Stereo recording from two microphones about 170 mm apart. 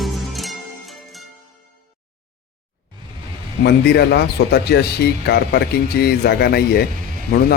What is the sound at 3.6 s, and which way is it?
Speech, 70° left (ahead or behind).